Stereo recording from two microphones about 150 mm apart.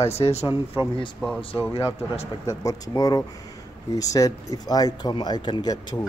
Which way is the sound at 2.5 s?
25° left (ahead or behind).